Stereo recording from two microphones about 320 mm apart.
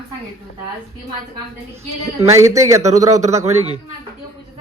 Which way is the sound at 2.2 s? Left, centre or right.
Centre.